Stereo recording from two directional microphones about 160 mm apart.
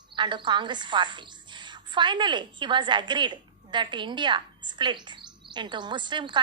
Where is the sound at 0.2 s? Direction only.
30° right (ahead or behind).